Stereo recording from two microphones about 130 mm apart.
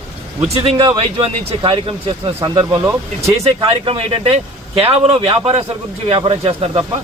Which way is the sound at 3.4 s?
50° right (ahead or behind).